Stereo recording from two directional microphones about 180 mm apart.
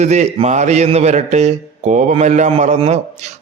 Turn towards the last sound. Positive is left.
turn(degrees=-40)  # may be behind; listen again after turning